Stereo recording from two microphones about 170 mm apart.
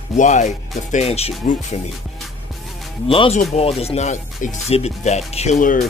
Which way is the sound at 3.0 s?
35° left (ahead or behind).